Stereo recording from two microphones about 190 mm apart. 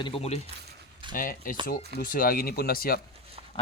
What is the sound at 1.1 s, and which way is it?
Speech, 45° left (ahead or behind).